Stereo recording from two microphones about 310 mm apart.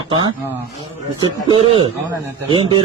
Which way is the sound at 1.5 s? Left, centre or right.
Centre.